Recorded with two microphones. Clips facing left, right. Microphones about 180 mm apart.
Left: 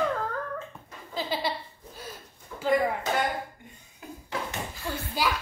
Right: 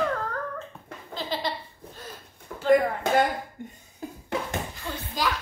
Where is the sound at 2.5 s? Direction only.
60° right (ahead or behind).